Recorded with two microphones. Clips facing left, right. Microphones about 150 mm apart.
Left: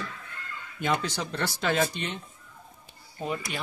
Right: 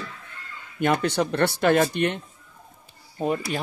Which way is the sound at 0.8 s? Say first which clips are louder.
Right 7 dB; 60° right (ahead or behind).